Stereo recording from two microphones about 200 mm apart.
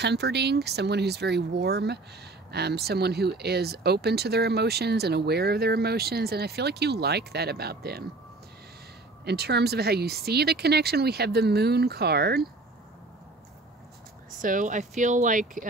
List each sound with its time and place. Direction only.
0.0 s speech: 55° right (ahead or behind)
9.2 s speech: 55° right (ahead or behind)
14.4 s speech: 40° right (ahead or behind)